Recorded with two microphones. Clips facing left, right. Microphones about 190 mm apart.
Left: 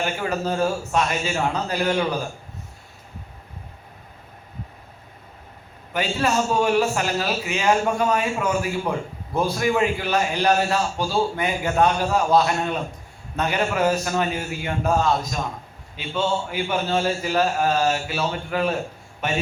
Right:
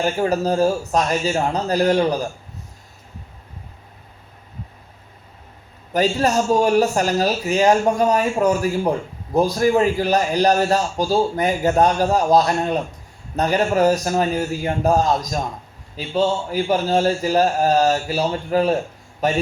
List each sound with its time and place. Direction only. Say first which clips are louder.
0.0 s a man's voice: right 5 dB; 35° right (ahead or behind)
5.9 s a man's voice: right 5 dB; 40° right (ahead or behind)